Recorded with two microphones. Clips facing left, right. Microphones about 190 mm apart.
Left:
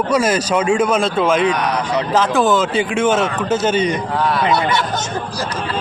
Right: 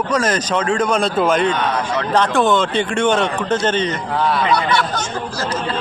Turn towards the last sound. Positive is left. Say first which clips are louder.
# even
turn(degrees=20)  # may be behind; listen again after turning